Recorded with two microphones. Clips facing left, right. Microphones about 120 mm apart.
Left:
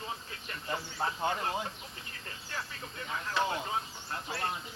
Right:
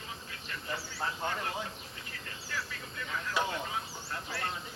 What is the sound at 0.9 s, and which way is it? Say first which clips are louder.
Speech: left 3 dB; 20° left (ahead or behind).